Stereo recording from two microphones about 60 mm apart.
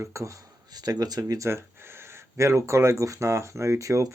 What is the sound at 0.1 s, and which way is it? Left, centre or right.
Speech, right.